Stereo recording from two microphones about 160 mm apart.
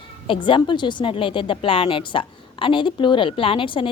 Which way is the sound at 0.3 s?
30° left (ahead or behind).